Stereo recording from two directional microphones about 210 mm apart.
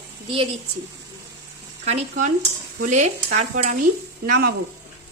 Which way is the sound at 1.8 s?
30° right (ahead or behind).